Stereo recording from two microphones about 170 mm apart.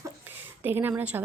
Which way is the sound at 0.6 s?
10° right (ahead or behind).